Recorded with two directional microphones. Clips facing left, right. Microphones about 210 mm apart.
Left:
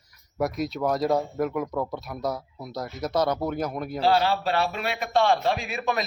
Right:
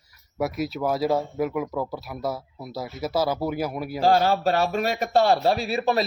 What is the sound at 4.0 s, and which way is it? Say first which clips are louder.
A man's voice: right 3 dB; 45° right (ahead or behind).